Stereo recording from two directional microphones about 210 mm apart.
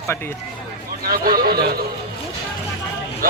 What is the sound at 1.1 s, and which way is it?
Speech, 45° right (ahead or behind).